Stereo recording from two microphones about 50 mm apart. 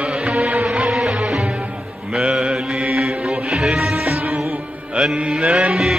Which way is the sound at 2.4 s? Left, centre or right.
Centre.